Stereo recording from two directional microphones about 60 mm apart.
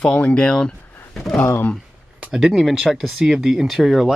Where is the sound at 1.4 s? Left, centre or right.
Left.